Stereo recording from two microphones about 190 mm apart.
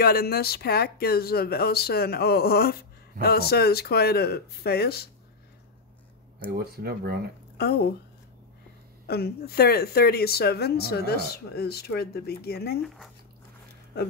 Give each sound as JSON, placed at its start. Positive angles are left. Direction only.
{"t": 0.0, "sound": "speech", "side_deg": 55}
{"t": 6.4, "sound": "speech", "side_deg": -55}
{"t": 7.5, "sound": "speech", "side_deg": 55}
{"t": 9.0, "sound": "speech", "side_deg": 55}
{"t": 12.8, "sound": "speech", "side_deg": 0}